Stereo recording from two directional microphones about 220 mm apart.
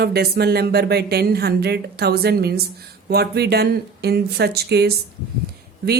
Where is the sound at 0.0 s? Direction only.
45° right (ahead or behind).